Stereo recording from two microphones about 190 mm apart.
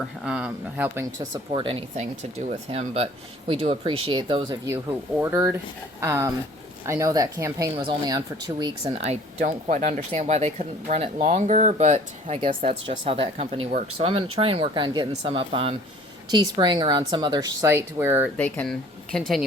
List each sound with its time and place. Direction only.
0.3 s speech: 5° right (ahead or behind)
1.5 s speech: 25° right (ahead or behind)
8.8 s speech: 35° right (ahead or behind)
9.4 s speech: 45° right (ahead or behind); by 18.3 s 15° right (ahead or behind)
18.3 s speech: 10° left (ahead or behind)